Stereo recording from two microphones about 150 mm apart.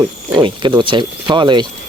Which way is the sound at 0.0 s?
30° right (ahead or behind).